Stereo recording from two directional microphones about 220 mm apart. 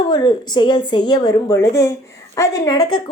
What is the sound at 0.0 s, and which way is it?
A woman's voice, 20° left (ahead or behind).